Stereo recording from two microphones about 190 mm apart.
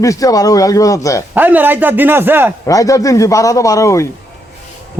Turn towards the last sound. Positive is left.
turn(degrees=15)  # may be behind; listen again after turning